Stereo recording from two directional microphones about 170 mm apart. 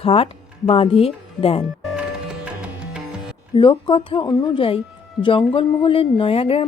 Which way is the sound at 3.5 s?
30° left (ahead or behind).